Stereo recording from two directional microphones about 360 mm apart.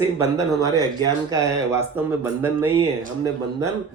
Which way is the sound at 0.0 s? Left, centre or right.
Centre.